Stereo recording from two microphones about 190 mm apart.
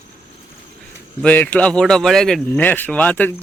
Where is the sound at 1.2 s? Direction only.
10° left (ahead or behind).